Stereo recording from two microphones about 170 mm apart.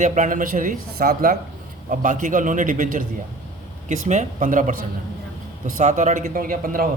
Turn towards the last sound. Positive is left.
turn(degrees=-55)  # may be behind; listen again after turning